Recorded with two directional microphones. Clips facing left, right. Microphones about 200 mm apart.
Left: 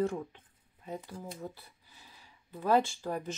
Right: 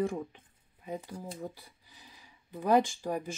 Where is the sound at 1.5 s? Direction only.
15° right (ahead or behind).